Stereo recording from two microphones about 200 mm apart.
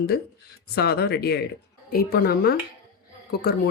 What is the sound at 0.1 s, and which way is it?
Speech, 55° left (ahead or behind).